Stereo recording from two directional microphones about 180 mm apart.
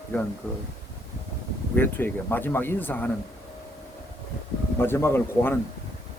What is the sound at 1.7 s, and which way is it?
Speech, 10° left (ahead or behind).